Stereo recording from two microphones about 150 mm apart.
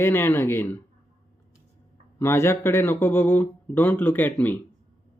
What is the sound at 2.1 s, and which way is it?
Speech, 15° left (ahead or behind).